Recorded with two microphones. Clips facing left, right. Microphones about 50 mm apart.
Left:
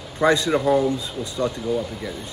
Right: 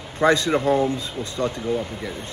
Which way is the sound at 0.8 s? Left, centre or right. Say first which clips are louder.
Left 1 dB; right.